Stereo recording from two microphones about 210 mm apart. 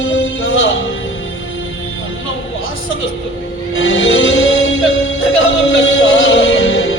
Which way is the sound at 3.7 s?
60° left (ahead or behind).